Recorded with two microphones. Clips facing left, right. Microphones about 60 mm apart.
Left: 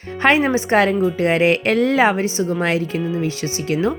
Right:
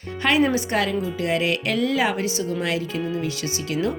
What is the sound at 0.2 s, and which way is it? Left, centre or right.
Speech, left.